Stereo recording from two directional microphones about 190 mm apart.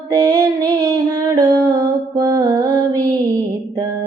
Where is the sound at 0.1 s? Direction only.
20° right (ahead or behind).